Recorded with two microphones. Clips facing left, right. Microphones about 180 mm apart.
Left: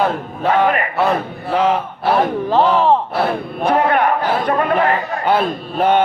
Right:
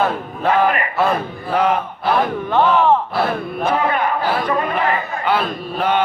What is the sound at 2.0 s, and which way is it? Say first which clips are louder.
Speech: left 3 dB; 35° left (ahead or behind).